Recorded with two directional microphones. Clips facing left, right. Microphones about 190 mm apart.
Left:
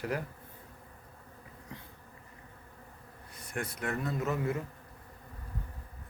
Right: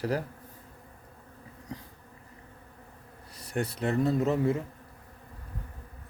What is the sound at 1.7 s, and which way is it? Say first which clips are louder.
Bee: right 7 dB; 35° right (ahead or behind).